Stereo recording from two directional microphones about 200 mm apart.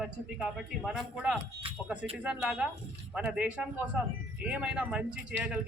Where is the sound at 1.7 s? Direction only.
25° right (ahead or behind).